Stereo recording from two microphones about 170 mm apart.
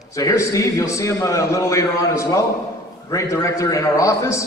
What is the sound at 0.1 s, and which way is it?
A man's voice, 20° left (ahead or behind).